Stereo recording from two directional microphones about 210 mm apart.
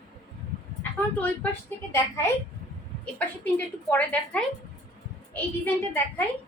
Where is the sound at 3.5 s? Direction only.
10° left (ahead or behind).